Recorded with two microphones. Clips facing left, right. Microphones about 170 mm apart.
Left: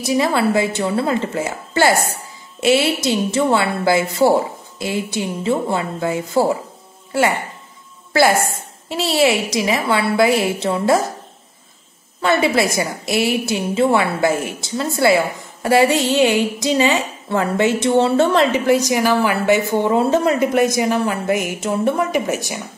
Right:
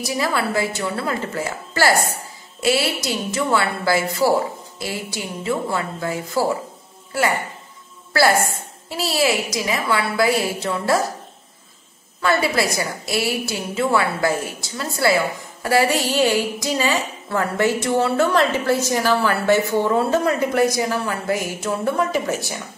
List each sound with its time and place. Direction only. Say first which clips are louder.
0.0 s a woman's voice: left 5 dB; 25° left (ahead or behind)
8.1 s a woman's voice: left 2 dB; 20° left (ahead or behind)
12.2 s a woman's voice: left 3 dB; 25° left (ahead or behind)